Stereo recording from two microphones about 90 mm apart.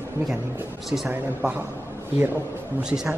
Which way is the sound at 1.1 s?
20° right (ahead or behind).